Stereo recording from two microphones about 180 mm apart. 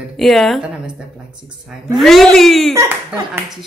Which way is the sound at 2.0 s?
Centre (ahead or behind).